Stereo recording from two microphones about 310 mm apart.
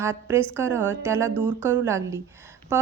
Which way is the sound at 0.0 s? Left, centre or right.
Centre.